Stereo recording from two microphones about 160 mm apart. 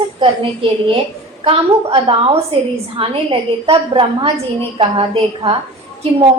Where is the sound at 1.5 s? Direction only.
35° right (ahead or behind).